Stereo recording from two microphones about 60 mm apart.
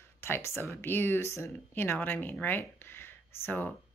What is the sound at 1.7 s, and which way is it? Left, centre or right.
Speech, left.